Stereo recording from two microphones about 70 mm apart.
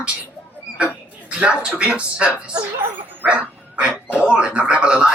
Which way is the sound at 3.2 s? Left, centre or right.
Centre.